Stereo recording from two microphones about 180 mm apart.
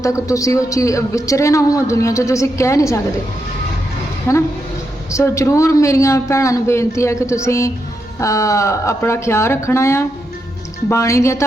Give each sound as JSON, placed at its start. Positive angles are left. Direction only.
{"t": 0.0, "sound": "a man's voice", "side_deg": 20}
{"t": 4.3, "sound": "a man's voice", "side_deg": 15}